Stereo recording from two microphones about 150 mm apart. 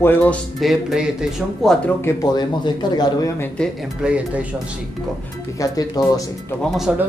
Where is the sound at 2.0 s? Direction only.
25° left (ahead or behind); by 3.7 s 10° left (ahead or behind).